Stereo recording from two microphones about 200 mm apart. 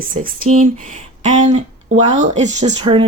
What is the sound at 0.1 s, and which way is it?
Speech, 40° right (ahead or behind).